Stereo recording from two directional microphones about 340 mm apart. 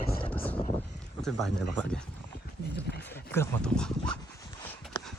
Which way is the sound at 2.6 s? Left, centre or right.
Left.